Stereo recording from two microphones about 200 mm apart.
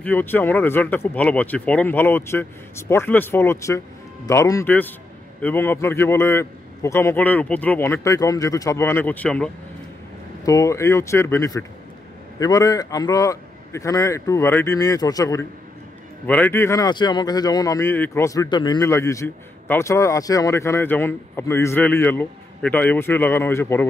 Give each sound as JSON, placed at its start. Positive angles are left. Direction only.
{"t": 0.0, "sound": "speech", "side_deg": 10}